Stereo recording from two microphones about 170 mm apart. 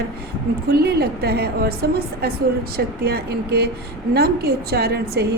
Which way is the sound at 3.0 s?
70° right (ahead or behind).